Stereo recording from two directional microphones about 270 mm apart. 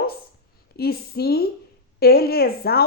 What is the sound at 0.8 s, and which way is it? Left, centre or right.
A woman's voice, left.